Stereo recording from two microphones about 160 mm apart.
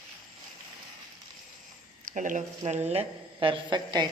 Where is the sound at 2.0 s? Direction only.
55° right (ahead or behind).